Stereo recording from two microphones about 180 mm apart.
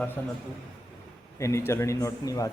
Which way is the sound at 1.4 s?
15° left (ahead or behind).